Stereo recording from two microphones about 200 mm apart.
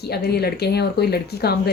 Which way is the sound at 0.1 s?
55° left (ahead or behind).